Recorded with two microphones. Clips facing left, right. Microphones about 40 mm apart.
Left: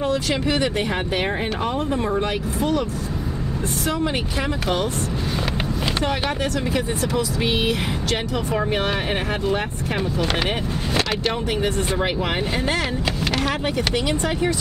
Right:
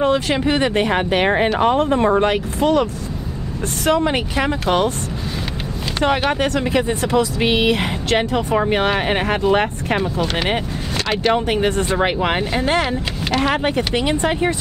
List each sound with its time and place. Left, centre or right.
0.0 s speech: right
6.0 s speech: right
8.5 s speech: right
9.5 s speech: right
11.3 s speech: right